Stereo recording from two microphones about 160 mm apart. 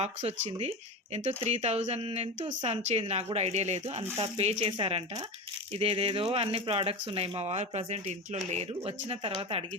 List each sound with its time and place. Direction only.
0.0 s speech: 40° right (ahead or behind)
4.0 s speech: 15° right (ahead or behind)
4.4 s speech: 40° right (ahead or behind)